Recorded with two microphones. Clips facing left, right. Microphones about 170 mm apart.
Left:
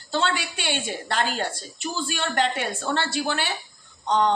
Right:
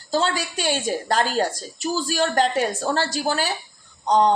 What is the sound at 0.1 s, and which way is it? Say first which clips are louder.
Speech: right 3 dB; 40° right (ahead or behind).